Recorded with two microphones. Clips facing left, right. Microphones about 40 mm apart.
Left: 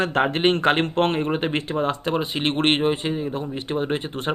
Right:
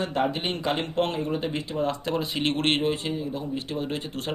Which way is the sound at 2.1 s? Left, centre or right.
Left.